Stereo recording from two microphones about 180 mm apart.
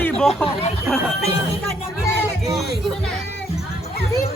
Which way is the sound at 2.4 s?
Centre (ahead or behind).